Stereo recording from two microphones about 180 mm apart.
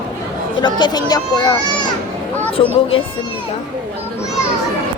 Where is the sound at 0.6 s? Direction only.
25° left (ahead or behind).